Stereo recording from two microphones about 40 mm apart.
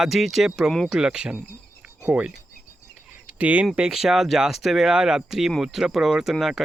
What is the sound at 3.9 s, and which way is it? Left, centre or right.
Speech, centre.